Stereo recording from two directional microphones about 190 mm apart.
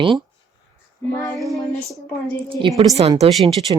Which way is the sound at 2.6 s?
25° right (ahead or behind).